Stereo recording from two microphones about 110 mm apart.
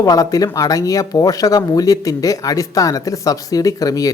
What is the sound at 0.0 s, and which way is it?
Speech, 35° left (ahead or behind).